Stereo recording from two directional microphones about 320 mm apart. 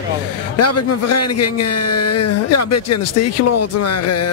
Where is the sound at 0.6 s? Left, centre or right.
Left.